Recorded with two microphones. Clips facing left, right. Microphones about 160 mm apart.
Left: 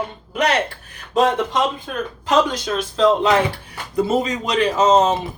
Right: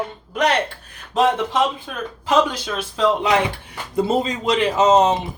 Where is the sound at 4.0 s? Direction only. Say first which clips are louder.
Left 1 dB; 25° right (ahead or behind).